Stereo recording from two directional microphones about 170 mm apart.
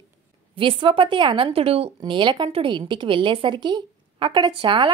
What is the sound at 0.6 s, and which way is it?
A woman's voice, 30° right (ahead or behind).